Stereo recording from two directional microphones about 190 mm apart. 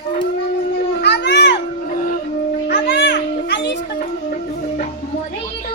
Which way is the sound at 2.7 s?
55° left (ahead or behind).